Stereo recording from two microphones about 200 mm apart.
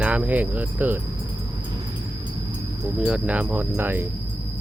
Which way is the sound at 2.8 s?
5° right (ahead or behind).